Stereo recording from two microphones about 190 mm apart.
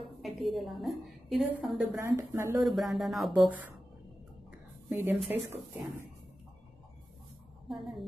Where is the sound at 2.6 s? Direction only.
Centre (ahead or behind).